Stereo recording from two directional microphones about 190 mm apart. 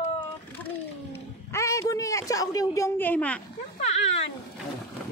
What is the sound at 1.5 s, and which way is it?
Speech, 15° left (ahead or behind).